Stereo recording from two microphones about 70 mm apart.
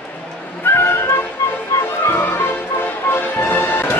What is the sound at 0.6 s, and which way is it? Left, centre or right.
Music, left.